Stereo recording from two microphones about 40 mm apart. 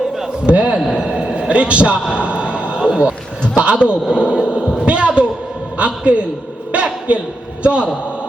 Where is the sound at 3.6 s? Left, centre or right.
Right.